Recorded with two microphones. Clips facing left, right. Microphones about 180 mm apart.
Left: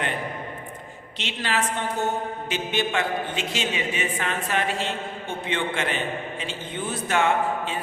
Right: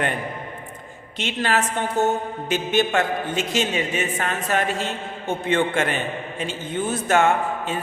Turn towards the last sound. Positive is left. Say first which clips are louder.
# right 2 dB
turn(degrees=-45)  # may be behind; listen again after turning